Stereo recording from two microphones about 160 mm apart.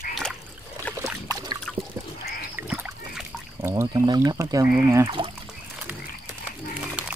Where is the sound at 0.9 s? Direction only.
20° right (ahead or behind).